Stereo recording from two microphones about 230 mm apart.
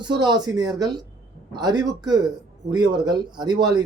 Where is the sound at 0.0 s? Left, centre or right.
Centre.